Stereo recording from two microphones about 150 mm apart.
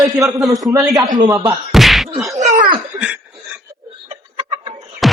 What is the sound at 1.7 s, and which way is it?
Whack, centre (ahead or behind).